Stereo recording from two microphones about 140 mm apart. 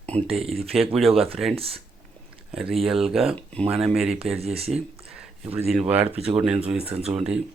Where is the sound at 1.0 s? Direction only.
Centre (ahead or behind).